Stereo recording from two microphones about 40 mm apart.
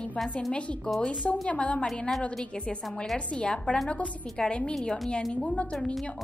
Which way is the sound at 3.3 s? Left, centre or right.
Left.